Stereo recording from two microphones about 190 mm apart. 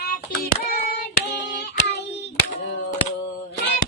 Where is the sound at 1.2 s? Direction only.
65° left (ahead or behind).